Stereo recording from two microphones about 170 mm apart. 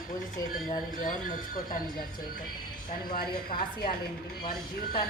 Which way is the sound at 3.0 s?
65° left (ahead or behind).